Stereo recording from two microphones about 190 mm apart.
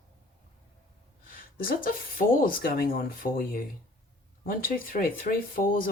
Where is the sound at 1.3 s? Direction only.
50° left (ahead or behind).